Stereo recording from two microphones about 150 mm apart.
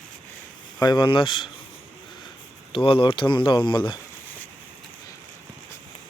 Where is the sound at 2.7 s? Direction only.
35° left (ahead or behind).